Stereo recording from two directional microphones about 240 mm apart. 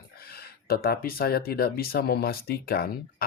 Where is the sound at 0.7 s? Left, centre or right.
Left.